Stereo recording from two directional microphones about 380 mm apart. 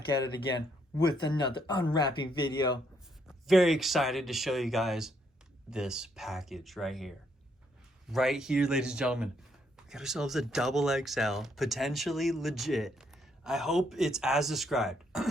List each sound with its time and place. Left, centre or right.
0.9 s speech: centre
3.2 s speech: centre
8.1 s speech: centre